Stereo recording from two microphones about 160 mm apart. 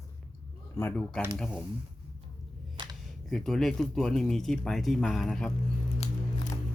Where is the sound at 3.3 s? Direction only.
Centre (ahead or behind).